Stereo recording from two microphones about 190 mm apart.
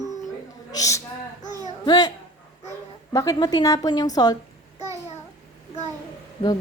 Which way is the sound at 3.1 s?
20° left (ahead or behind).